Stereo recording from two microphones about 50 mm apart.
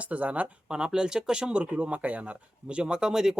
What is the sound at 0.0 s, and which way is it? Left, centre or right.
Speech, right.